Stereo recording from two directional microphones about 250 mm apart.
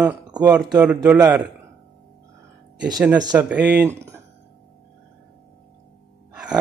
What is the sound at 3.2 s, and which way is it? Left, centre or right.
Speech, centre.